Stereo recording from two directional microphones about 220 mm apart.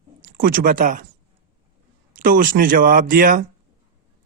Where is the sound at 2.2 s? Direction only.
40° right (ahead or behind).